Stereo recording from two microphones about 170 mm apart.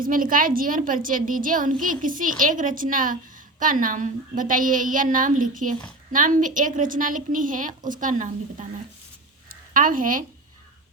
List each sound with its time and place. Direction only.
0.0 s a woman's voice: 55° right (ahead or behind)